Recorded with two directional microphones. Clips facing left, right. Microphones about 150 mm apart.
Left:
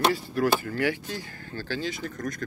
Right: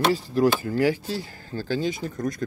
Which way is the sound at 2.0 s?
25° right (ahead or behind).